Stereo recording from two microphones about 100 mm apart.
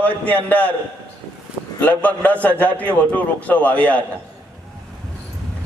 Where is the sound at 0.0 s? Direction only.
15° left (ahead or behind).